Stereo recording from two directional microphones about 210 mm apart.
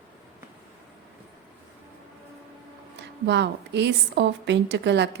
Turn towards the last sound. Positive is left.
turn(degrees=-55)  # may be behind; listen again after turning